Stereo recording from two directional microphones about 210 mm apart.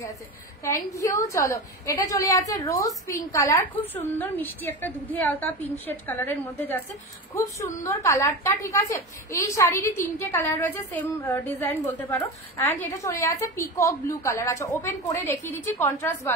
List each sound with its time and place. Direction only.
0.9 s a woman's voice: 15° left (ahead or behind)